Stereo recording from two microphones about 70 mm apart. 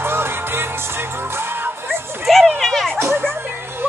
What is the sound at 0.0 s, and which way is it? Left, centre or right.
Music, right.